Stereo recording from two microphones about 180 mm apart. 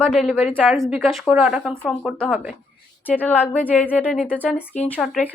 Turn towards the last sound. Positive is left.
turn(degrees=0)  # may be behind; listen again after turning